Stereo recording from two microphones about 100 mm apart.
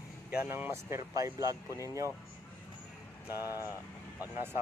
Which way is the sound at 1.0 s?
35° right (ahead or behind).